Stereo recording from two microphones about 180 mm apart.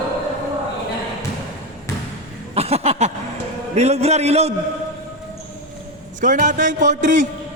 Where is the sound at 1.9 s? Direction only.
15° left (ahead or behind).